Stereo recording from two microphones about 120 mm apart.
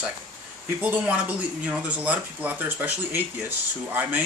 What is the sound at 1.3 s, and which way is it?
Speech, 10° right (ahead or behind).